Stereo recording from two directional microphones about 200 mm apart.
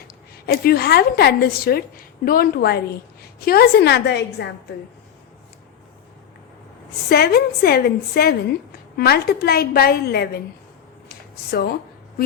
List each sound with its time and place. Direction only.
0.4 s a woman's voice: 50° left (ahead or behind)
7.1 s a woman's voice: 50° left (ahead or behind)
11.1 s a sound: 50° left (ahead or behind)